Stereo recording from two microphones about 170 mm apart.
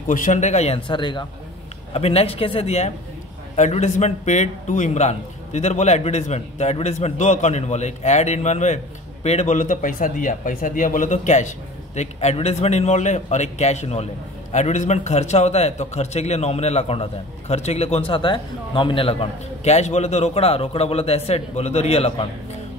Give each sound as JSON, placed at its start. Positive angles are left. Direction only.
{"t": 0.1, "sound": "a man's voice", "side_deg": 50}
{"t": 0.8, "sound": "a man's voice", "side_deg": 30}